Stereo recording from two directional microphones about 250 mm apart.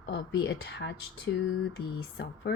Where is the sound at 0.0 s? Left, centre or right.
Left.